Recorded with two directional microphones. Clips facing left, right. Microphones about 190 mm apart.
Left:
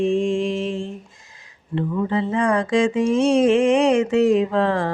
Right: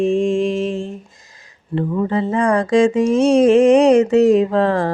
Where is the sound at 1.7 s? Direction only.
45° right (ahead or behind).